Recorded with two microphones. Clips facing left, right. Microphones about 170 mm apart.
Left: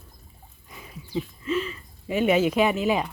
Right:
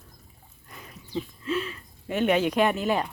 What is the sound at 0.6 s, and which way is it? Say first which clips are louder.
Speech: left 2 dB; 5° left (ahead or behind).